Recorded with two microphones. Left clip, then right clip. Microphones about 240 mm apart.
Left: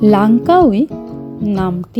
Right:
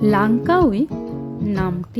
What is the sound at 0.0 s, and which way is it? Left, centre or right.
Speech, centre.